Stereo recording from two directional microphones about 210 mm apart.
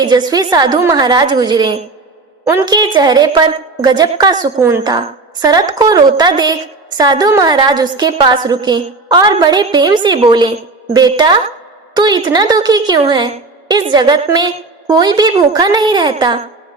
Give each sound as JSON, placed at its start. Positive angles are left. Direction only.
{"t": 0.0, "sound": "a woman's voice", "side_deg": -20}